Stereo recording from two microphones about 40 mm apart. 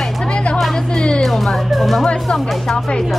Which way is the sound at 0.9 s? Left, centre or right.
Left.